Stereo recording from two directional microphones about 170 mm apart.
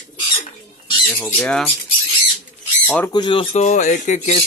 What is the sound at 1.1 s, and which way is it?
Speech, 10° left (ahead or behind).